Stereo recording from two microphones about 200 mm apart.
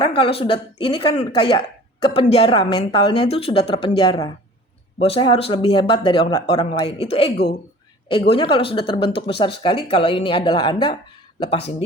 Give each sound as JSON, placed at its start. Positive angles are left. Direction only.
{"t": 0.0, "sound": "speech", "side_deg": 25}